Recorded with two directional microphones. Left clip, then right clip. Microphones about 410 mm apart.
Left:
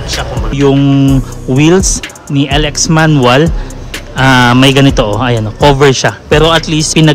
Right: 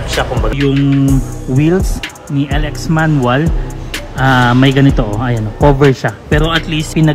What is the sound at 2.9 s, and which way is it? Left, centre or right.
Speech, right.